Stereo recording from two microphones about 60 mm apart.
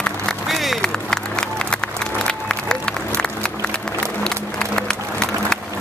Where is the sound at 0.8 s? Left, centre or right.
Centre.